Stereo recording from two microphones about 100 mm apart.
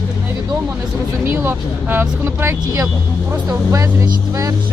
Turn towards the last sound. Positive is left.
turn(degrees=-35)  # may be behind; listen again after turning